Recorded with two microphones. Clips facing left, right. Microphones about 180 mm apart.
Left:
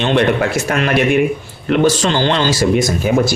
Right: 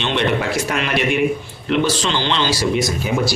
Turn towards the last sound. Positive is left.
turn(degrees=50)  # may be behind; listen again after turning